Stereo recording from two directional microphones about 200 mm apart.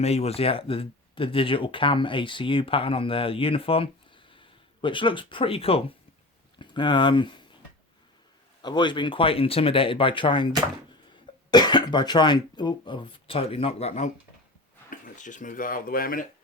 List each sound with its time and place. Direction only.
0.0 s speech: 30° left (ahead or behind)
8.6 s speech: 20° left (ahead or behind)
11.5 s speech: 20° left (ahead or behind); by 16.2 s 45° left (ahead or behind)